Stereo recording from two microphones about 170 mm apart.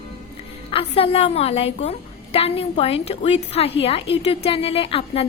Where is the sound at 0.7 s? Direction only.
35° left (ahead or behind).